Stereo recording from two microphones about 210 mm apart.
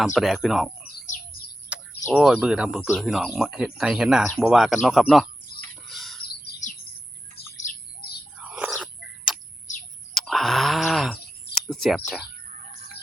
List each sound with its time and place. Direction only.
0.0 s speech: centre (ahead or behind)
1.0 s bird: 35° left (ahead or behind)
1.7 s bird: 5° right (ahead or behind)
2.1 s speech: 5° right (ahead or behind)
5.5 s chicken: 45° left (ahead or behind)
5.9 s bird: centre (ahead or behind)
6.5 s chirp: 50° left (ahead or behind)
7.3 s bird: 45° left (ahead or behind)
8.4 s bird: 5° right (ahead or behind)
10.2 s a sound: centre (ahead or behind)
11.5 s speech: centre (ahead or behind)